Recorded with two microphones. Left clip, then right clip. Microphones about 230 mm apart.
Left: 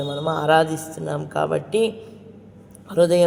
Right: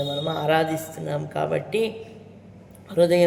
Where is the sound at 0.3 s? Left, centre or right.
Left.